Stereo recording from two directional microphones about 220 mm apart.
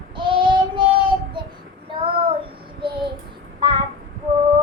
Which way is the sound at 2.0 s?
25° right (ahead or behind).